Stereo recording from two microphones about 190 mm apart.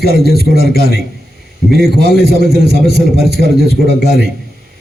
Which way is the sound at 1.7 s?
Centre (ahead or behind).